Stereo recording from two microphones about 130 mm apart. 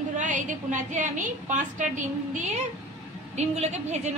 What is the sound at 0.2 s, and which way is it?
A woman's voice, 75° right (ahead or behind).